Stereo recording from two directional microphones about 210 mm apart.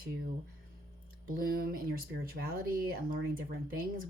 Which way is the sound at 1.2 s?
45° right (ahead or behind).